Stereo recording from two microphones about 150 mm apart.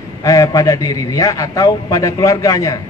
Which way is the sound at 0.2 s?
20° left (ahead or behind).